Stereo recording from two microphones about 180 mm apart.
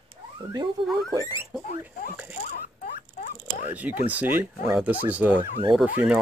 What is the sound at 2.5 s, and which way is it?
Rodents, 50° left (ahead or behind).